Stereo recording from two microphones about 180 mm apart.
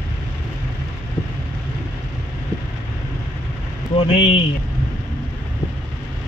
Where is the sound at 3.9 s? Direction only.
30° left (ahead or behind).